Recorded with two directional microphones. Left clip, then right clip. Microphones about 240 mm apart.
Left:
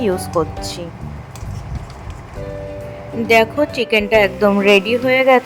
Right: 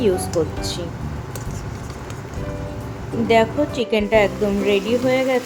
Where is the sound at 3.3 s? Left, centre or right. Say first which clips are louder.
Left 4 dB; left.